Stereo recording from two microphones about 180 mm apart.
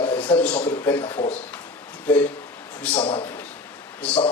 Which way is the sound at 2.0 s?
10° left (ahead or behind).